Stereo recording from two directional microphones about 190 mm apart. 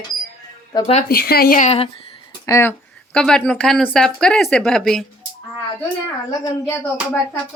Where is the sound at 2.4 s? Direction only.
15° left (ahead or behind).